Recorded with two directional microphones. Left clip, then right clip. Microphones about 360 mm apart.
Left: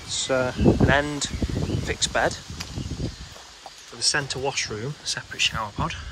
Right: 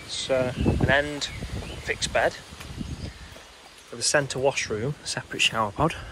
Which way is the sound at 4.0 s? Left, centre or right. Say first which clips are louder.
Right 1 dB; centre.